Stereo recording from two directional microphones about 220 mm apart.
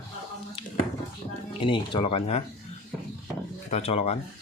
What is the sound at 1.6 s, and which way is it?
Speech, 20° left (ahead or behind).